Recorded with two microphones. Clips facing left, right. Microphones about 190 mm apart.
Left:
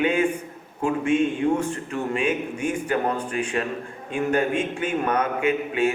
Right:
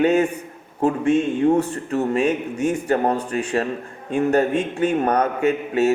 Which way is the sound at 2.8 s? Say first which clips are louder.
Right 4 dB; 40° right (ahead or behind).